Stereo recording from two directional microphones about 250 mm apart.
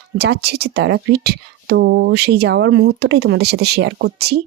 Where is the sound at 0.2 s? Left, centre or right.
Right.